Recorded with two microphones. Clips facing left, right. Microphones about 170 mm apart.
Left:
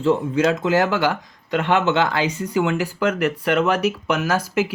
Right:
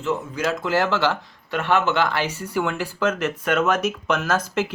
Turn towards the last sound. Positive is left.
turn(degrees=10)  # may be behind; listen again after turning